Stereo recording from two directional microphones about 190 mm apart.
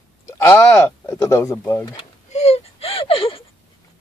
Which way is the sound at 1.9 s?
35° left (ahead or behind).